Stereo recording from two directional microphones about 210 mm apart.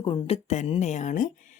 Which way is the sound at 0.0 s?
25° left (ahead or behind).